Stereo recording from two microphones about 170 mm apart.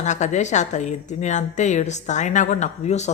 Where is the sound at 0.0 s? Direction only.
45° left (ahead or behind).